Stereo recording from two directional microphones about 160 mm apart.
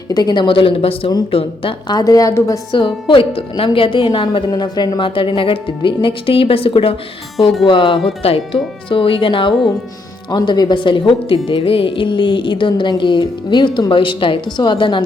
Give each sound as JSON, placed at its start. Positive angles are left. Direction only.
{"t": 0.1, "sound": "speech", "side_deg": 25}
{"t": 7.3, "sound": "speech", "side_deg": 0}
{"t": 7.7, "sound": "speech", "side_deg": 30}